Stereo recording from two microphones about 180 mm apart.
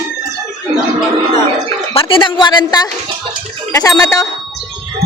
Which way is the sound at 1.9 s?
30° left (ahead or behind).